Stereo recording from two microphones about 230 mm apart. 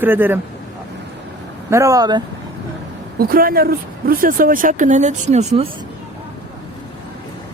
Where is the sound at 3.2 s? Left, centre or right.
Right.